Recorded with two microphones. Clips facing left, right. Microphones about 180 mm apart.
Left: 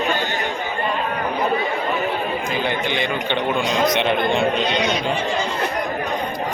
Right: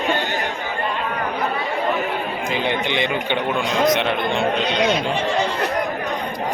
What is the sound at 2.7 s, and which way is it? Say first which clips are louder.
Speech: right 2 dB; 20° right (ahead or behind).